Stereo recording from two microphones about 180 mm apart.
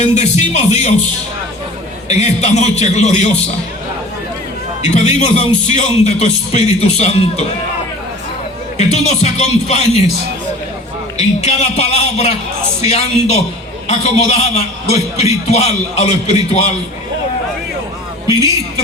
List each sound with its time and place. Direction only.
0.0 s speech: 40° left (ahead or behind)
2.0 s speech: 40° left (ahead or behind)
4.8 s speech: 40° left (ahead or behind)
8.9 s speech: 40° left (ahead or behind)
11.4 s speech: 40° left (ahead or behind)
18.3 s a woman's voice: 20° right (ahead or behind)